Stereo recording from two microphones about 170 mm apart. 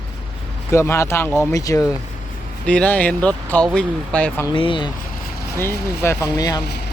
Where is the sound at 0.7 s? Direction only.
15° left (ahead or behind).